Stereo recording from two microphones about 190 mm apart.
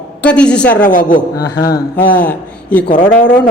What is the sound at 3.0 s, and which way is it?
Speech, 45° left (ahead or behind).